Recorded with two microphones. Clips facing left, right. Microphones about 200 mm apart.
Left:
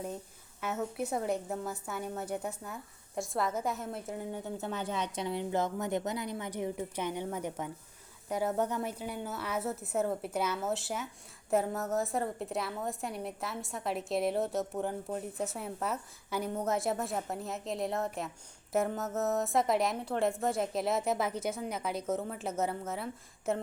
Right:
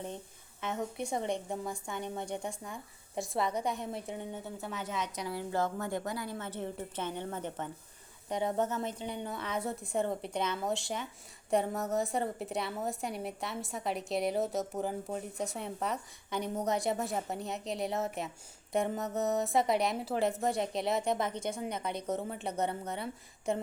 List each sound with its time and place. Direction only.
0.6 s a woman's voice: 10° left (ahead or behind)
4.6 s a woman's voice: 30° left (ahead or behind); by 23.6 s centre (ahead or behind)